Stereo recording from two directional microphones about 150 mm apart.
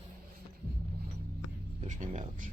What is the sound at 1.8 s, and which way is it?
Music, 55° right (ahead or behind).